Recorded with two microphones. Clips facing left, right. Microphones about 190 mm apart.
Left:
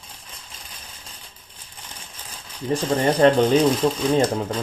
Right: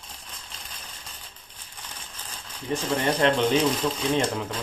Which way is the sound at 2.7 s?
35° left (ahead or behind).